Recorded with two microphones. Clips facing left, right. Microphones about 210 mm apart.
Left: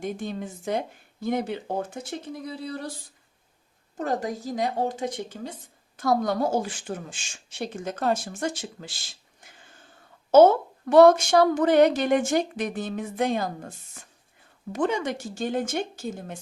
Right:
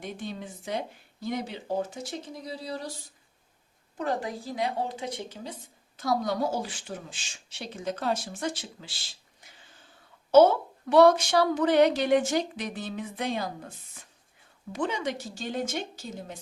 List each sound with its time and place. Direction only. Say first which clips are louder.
0.0 s a woman's voice: left 5 dB; 45° left (ahead or behind)
3.9 s a woman's voice: left 3 dB; 45° left (ahead or behind)
10.3 s a woman's voice: left 3 dB; 45° left (ahead or behind)